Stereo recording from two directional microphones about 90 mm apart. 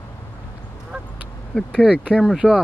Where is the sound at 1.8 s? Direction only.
10° right (ahead or behind).